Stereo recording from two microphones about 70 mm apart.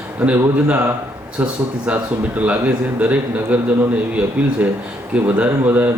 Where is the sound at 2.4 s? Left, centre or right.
Centre.